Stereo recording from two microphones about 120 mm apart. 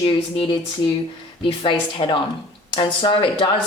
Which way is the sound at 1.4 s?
45° left (ahead or behind).